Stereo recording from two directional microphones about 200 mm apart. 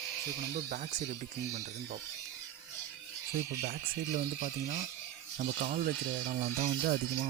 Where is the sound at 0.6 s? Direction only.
40° right (ahead or behind).